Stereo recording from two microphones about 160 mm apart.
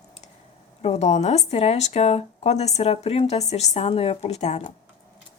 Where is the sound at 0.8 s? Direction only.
45° left (ahead or behind).